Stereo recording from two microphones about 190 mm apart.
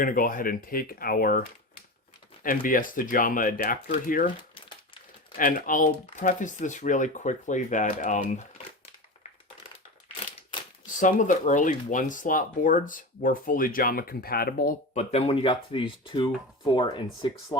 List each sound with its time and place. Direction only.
0.0 s speech: 45° left (ahead or behind)
5.4 s speech: 45° left (ahead or behind)
10.9 s speech: 40° left (ahead or behind)
15.1 s speech: 30° left (ahead or behind)